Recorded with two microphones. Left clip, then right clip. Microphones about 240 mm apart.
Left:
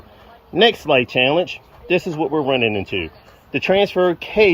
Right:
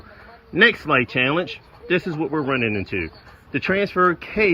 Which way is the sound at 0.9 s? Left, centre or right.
Centre.